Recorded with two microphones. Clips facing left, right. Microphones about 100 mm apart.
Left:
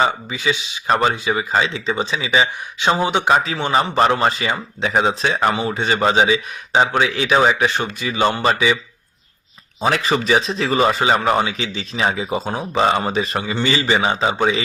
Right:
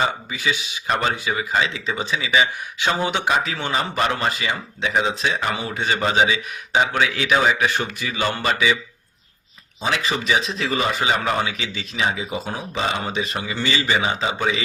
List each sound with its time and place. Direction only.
0.0 s a man's voice: 25° left (ahead or behind)
3.2 s speech: 35° left (ahead or behind)
5.7 s a man's voice: 30° left (ahead or behind)
9.8 s speech: 40° left (ahead or behind)